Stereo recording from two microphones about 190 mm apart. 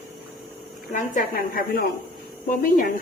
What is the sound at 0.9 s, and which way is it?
A woman's voice, 45° left (ahead or behind).